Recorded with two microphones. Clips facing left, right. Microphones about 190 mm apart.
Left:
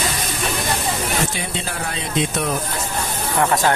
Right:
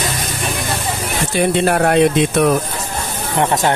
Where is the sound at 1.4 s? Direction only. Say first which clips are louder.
Right 13 dB; 65° right (ahead or behind).